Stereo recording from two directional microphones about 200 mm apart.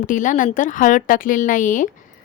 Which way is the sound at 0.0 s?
40° left (ahead or behind).